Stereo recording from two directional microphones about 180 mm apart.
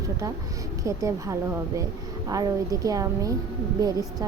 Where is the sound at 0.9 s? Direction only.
15° right (ahead or behind).